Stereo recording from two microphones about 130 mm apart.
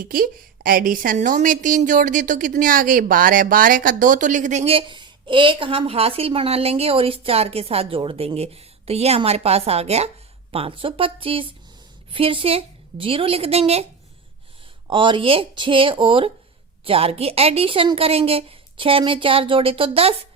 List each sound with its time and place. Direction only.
0.0 s a woman's voice: 90° right; by 4.6 s 70° right (ahead or behind)
4.6 s a woman's voice: 45° right (ahead or behind)
14.8 s a woman's voice: 40° right (ahead or behind)